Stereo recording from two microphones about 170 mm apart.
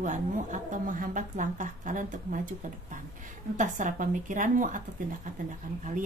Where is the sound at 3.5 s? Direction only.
50° right (ahead or behind).